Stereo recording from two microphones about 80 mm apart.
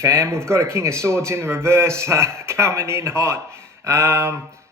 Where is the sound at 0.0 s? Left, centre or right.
Right.